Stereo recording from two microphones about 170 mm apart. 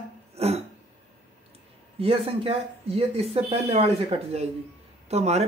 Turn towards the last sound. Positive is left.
turn(degrees=-40)  # may be behind; listen again after turning